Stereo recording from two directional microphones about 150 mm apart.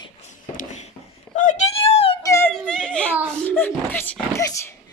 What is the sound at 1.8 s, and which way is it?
Wail, 40° left (ahead or behind).